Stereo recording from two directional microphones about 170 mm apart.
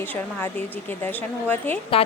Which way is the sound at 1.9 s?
35° left (ahead or behind).